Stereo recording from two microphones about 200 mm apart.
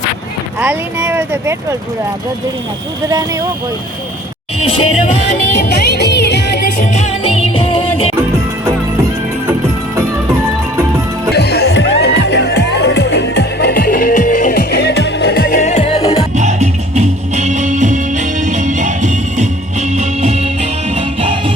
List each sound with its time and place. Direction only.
0.6 s speech: 10° right (ahead or behind)
5.5 s music: 55° left (ahead or behind)
6.7 s music: 40° left (ahead or behind)
7.3 s music: 30° left (ahead or behind)
11.3 s music: 55° left (ahead or behind); by 16.2 s 30° left (ahead or behind)
16.3 s music: 35° right (ahead or behind)